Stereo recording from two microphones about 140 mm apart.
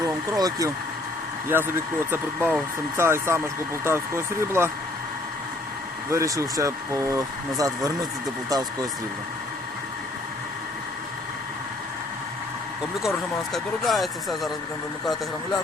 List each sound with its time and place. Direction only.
0.0 s vehicle: 25° right (ahead or behind)
1.5 s speech: 15° right (ahead or behind)
6.1 s speech: 20° right (ahead or behind)
13.0 s speech: centre (ahead or behind)